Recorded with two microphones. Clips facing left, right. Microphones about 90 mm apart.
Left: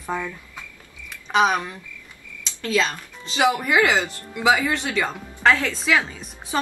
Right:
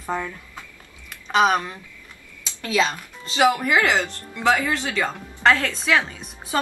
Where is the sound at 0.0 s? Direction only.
5° right (ahead or behind).